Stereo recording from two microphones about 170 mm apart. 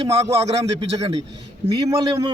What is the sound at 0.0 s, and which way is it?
Speech, 35° right (ahead or behind).